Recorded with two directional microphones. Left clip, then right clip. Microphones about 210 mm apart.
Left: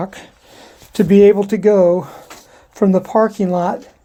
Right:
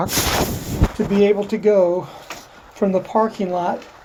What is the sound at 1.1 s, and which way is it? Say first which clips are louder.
Speech: left 7 dB; 45° left (ahead or behind).